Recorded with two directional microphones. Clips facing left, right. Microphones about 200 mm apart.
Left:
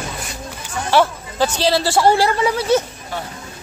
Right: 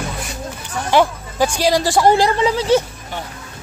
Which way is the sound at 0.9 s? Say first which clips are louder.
Right 1 dB; 15° right (ahead or behind).